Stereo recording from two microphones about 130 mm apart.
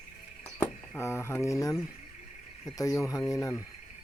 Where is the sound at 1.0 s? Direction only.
20° left (ahead or behind).